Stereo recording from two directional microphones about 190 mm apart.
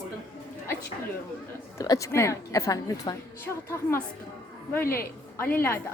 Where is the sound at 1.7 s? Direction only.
15° left (ahead or behind).